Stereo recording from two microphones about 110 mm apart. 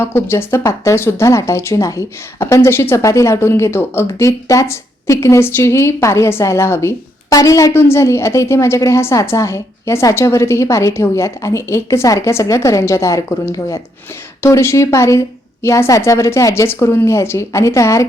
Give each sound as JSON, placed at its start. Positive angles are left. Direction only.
{"t": 0.0, "sound": "speech", "side_deg": 20}